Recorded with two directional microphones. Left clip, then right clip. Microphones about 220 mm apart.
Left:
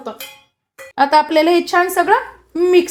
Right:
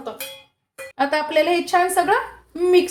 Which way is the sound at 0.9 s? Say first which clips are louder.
Left 7 dB; 40° left (ahead or behind).